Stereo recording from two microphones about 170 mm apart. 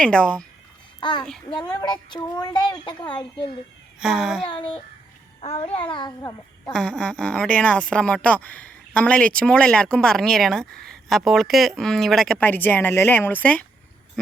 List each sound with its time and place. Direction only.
0.0 s a child's voice: 5° left (ahead or behind)
0.9 s a child's voice: 25° left (ahead or behind)
4.0 s a child's voice: 5° right (ahead or behind)
4.4 s a woman's voice: 25° left (ahead or behind)
6.7 s speech: centre (ahead or behind)